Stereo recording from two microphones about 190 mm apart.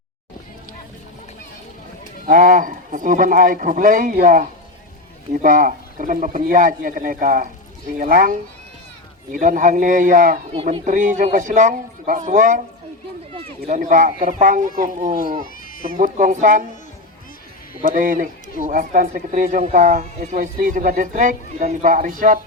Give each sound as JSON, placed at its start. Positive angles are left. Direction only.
{"t": 2.2, "sound": "speech", "side_deg": -45}
{"t": 10.5, "sound": "a man's voice", "side_deg": -35}
{"t": 15.7, "sound": "a sound", "side_deg": 45}
{"t": 16.0, "sound": "a man's voice", "side_deg": -40}
{"t": 17.8, "sound": "speech", "side_deg": -45}